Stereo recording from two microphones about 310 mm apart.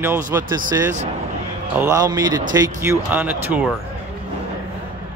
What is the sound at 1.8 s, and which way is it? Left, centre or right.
A man's voice, centre.